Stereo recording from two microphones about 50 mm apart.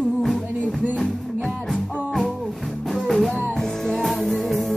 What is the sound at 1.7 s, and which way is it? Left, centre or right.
Music, centre.